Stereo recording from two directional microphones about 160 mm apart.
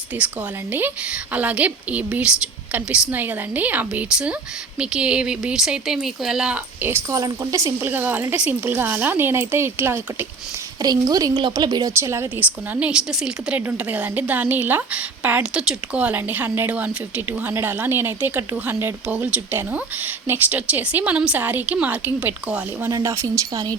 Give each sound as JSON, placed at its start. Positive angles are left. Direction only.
{"t": 0.1, "sound": "a woman's voice", "side_deg": -10}